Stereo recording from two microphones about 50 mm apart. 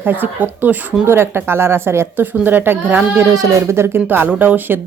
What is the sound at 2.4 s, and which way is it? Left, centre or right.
Speech, right.